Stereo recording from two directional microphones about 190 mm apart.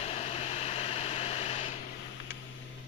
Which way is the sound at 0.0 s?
35° left (ahead or behind).